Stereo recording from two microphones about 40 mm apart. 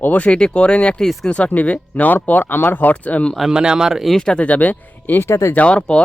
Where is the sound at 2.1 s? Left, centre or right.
Left.